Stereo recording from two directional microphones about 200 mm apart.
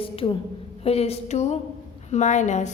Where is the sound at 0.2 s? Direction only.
25° left (ahead or behind).